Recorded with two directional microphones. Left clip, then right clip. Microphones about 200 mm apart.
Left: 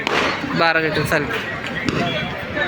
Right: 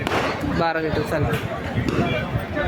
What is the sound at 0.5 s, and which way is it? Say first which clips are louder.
Speech: left 6 dB; 5° right (ahead or behind).